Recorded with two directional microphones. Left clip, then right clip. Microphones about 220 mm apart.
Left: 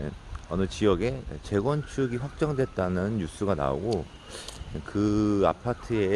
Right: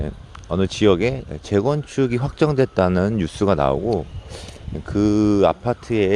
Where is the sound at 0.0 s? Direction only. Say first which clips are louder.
Right 6 dB; 35° right (ahead or behind).